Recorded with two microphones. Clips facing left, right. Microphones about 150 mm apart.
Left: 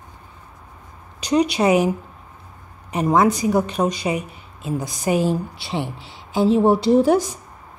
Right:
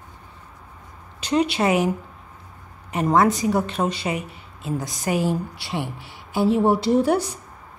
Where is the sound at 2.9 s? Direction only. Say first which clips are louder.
Left 1 dB; 15° left (ahead or behind).